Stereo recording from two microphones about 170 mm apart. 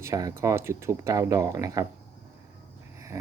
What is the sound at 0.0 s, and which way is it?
Speech, 20° right (ahead or behind).